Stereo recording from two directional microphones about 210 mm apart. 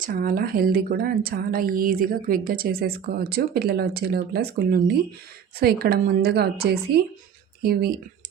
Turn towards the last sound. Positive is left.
turn(degrees=-45)  # may be behind; listen again after turning